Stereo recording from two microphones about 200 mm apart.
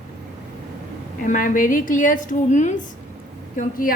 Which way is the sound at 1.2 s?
45° left (ahead or behind).